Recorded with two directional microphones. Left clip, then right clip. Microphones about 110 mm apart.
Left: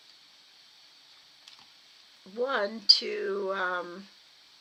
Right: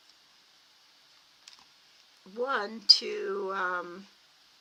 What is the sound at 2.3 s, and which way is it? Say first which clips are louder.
Speech: left 2 dB; 40° right (ahead or behind).